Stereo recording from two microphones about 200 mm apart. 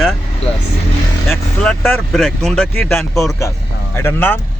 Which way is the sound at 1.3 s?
10° left (ahead or behind).